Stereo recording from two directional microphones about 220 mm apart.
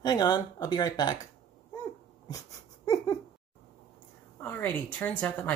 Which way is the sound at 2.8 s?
15° left (ahead or behind).